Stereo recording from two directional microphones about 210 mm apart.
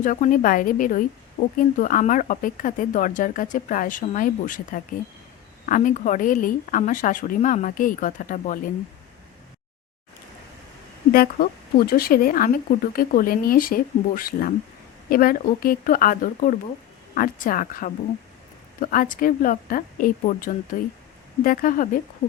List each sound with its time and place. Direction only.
0.0 s a woman's voice: 40° left (ahead or behind)
11.1 s a woman's voice: 45° left (ahead or behind)